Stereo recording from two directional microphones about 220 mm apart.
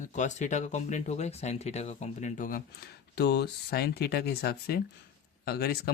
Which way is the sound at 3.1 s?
50° left (ahead or behind).